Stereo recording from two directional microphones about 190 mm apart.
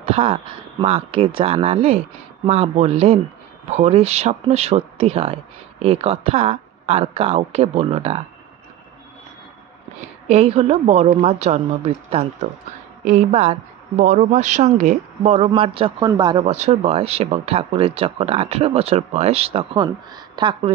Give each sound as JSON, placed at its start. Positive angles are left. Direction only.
{"t": 0.0, "sound": "speech", "side_deg": -30}
{"t": 10.2, "sound": "speech", "side_deg": -35}
{"t": 16.4, "sound": "speech", "side_deg": -35}